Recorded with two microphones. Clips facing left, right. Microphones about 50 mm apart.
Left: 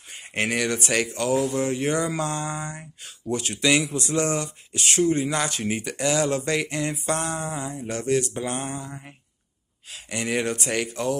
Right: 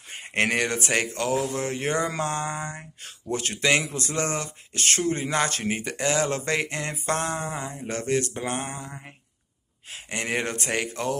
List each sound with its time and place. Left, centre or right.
0.3 s speech: right
0.7 s speech: right
9.8 s speech: right